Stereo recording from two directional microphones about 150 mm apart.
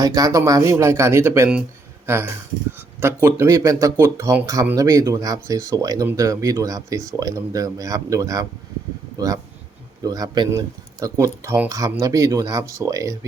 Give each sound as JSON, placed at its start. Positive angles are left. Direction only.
{"t": 0.0, "sound": "speech", "side_deg": -25}